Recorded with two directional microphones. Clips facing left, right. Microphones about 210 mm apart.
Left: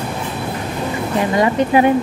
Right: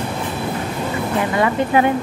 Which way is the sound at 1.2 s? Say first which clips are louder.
Left 3 dB; 20° left (ahead or behind).